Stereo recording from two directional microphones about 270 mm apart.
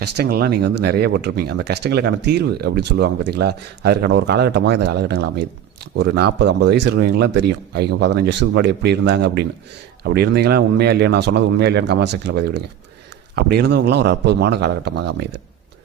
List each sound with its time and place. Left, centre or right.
0.0 s speech: right